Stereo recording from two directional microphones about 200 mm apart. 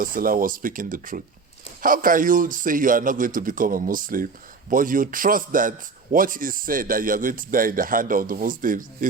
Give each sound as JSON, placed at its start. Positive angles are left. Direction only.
{"t": 0.0, "sound": "a man's voice", "side_deg": -45}